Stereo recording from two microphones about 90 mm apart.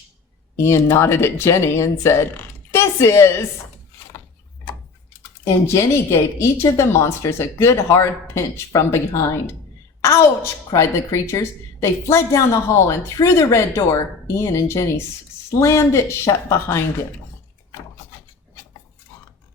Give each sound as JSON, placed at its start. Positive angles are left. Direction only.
{"t": 0.5, "sound": "speech", "side_deg": 30}
{"t": 5.5, "sound": "speech", "side_deg": 30}
{"t": 10.0, "sound": "a woman's voice", "side_deg": 30}